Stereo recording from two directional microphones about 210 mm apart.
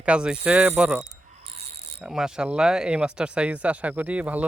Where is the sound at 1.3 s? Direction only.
30° right (ahead or behind).